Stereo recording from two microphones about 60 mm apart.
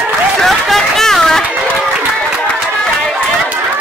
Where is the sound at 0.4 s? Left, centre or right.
Centre.